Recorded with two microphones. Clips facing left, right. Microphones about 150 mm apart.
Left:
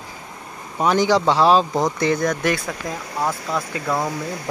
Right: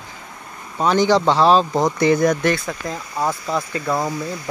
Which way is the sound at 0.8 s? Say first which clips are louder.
Right 1 dB; 10° left (ahead or behind).